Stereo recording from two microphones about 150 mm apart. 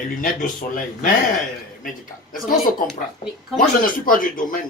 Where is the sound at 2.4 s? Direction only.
70° left (ahead or behind).